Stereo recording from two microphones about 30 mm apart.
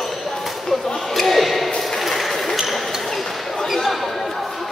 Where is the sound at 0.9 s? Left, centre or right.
Centre.